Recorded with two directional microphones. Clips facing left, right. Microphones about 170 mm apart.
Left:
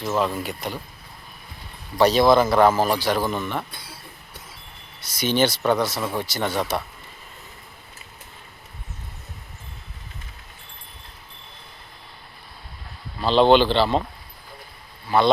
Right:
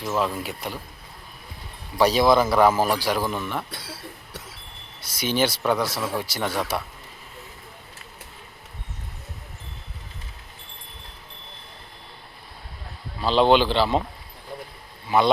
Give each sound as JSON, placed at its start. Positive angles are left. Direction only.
{"t": 0.0, "sound": "speech", "side_deg": 0}
{"t": 2.0, "sound": "speech", "side_deg": -10}
{"t": 3.7, "sound": "cough", "side_deg": -80}
{"t": 5.2, "sound": "speech", "side_deg": -5}
{"t": 13.2, "sound": "speech", "side_deg": -5}